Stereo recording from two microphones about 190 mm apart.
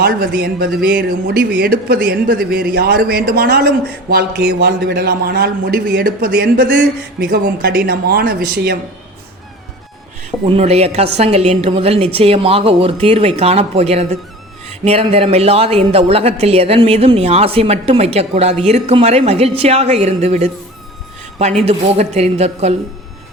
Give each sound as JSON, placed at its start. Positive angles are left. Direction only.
{"t": 0.3, "sound": "a man's voice", "side_deg": -55}
{"t": 10.4, "sound": "speech", "side_deg": -30}
{"t": 21.6, "sound": "speech", "side_deg": -35}